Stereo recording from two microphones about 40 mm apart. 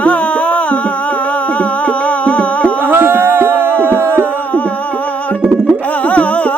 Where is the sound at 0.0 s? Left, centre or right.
Left.